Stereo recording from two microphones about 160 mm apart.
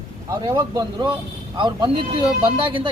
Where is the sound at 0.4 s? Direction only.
30° right (ahead or behind).